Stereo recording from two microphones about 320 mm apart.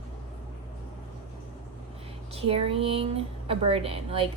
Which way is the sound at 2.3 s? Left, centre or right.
Centre.